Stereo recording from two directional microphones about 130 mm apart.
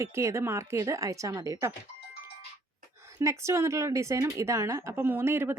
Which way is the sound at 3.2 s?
25° right (ahead or behind).